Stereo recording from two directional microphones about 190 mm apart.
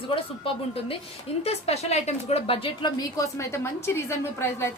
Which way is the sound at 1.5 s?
35° left (ahead or behind).